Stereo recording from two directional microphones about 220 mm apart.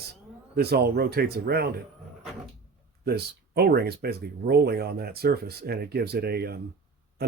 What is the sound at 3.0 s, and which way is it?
Speech, 45° right (ahead or behind).